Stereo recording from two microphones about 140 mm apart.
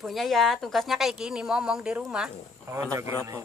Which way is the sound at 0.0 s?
Centre (ahead or behind).